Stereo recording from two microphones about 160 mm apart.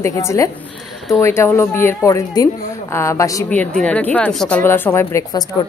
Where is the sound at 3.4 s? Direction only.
10° left (ahead or behind).